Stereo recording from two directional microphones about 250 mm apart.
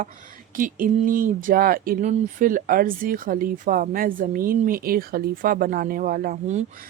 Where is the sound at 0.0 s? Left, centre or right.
Right.